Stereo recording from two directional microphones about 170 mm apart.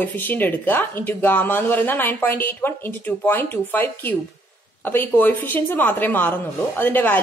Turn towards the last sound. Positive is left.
turn(degrees=10)  # may be behind; listen again after turning